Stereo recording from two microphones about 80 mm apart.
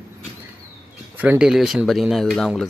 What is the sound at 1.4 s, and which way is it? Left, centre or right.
Speech, centre.